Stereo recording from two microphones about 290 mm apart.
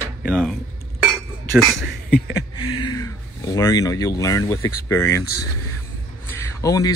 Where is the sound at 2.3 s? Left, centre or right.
Centre.